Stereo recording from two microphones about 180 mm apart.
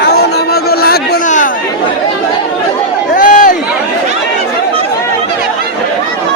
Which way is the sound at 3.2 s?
45° left (ahead or behind).